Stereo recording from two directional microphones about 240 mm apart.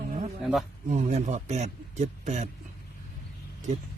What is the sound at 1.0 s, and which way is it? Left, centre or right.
Speech, right.